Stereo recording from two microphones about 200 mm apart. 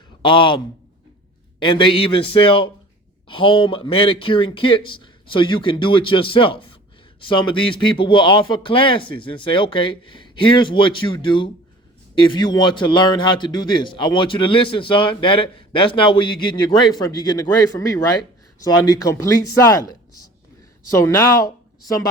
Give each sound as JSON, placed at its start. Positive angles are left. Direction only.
{"t": 0.2, "sound": "a man's voice", "side_deg": 25}